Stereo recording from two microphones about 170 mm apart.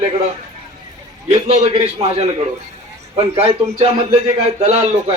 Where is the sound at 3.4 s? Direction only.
35° right (ahead or behind).